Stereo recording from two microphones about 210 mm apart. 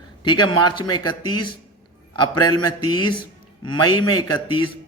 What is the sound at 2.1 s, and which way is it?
A man's voice, 20° left (ahead or behind).